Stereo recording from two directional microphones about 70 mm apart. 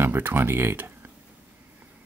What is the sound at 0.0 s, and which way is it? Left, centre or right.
Speech, right.